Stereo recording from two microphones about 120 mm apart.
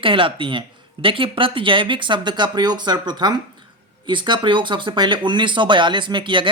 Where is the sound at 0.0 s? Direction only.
45° right (ahead or behind).